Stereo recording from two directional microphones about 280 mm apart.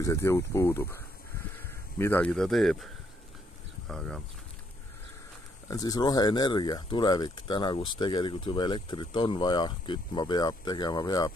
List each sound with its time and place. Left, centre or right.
0.0 s speech: centre
5.7 s speech: centre